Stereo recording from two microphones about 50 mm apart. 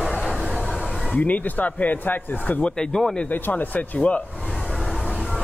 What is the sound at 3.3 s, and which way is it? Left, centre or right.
Speech, left.